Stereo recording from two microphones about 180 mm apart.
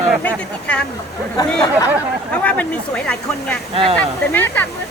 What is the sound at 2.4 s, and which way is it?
Speech, 10° left (ahead or behind).